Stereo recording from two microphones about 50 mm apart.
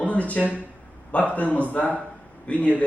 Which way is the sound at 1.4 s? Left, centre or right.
Left.